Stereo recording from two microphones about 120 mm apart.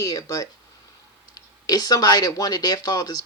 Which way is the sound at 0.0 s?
30° left (ahead or behind).